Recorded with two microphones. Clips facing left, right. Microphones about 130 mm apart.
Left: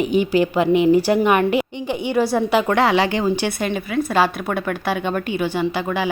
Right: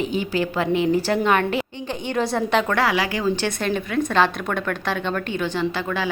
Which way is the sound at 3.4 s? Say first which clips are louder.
Left 1 dB; 5° left (ahead or behind).